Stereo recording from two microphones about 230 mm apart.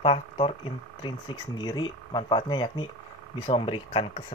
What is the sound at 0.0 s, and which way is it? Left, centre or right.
Speech, left.